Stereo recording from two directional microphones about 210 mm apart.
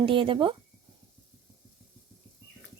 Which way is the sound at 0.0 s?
25° right (ahead or behind).